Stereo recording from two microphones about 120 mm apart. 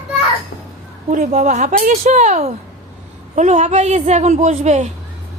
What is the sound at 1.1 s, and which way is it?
A woman's voice, 90° right.